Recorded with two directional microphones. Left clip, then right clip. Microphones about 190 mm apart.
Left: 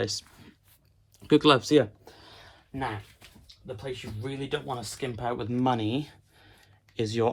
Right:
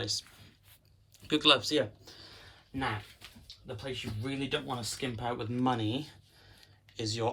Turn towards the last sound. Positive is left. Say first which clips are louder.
# left 7 dB
turn(degrees=25)  # may be behind; listen again after turning